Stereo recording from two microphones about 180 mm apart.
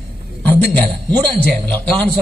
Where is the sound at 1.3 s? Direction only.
5° left (ahead or behind).